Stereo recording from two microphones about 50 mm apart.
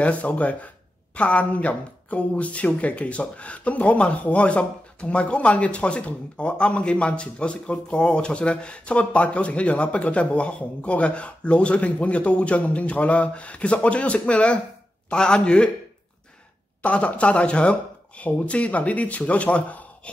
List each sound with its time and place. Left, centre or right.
0.0 s speech: left
16.8 s speech: left